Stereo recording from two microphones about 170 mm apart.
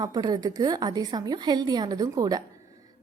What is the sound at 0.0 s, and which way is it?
A woman's voice, 20° right (ahead or behind).